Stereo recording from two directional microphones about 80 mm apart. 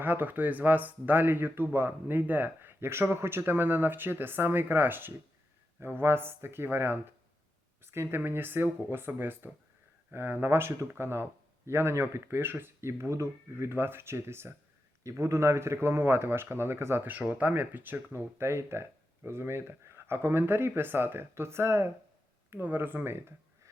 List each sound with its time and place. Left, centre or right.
0.0 s speech: right
17.1 s speech: centre